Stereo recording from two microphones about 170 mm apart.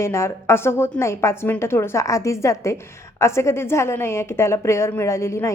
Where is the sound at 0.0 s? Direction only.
15° left (ahead or behind).